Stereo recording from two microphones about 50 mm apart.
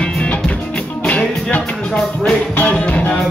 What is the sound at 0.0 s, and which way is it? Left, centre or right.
Music, left.